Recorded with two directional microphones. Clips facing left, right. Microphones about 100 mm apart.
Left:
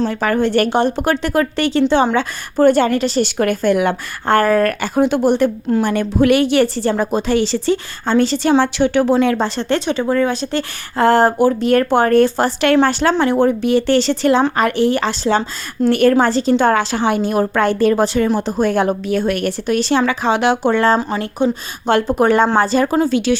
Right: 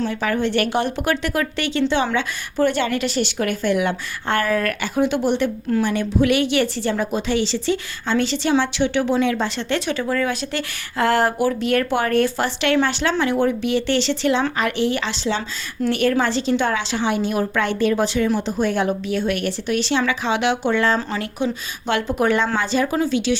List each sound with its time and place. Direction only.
0.1 s a woman's voice: 45° left (ahead or behind)